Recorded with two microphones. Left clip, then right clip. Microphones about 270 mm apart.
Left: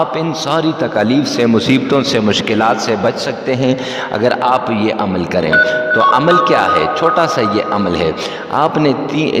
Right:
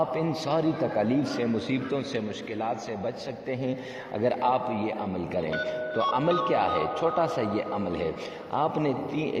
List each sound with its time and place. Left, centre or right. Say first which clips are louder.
0.5 s a man's voice: left 11 dB; left
4.2 s a man's voice: left 11 dB; left